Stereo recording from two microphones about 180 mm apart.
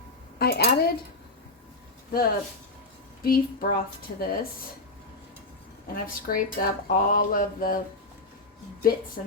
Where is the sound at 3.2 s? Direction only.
55° left (ahead or behind).